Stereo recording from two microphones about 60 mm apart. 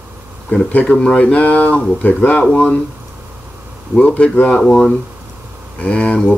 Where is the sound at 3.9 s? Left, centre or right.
Left.